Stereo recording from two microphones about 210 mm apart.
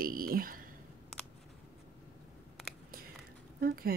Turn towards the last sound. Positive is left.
turn(degrees=-45)  # may be behind; listen again after turning